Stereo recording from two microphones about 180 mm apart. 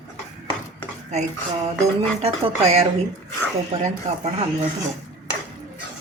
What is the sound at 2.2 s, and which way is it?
Speech, 35° right (ahead or behind).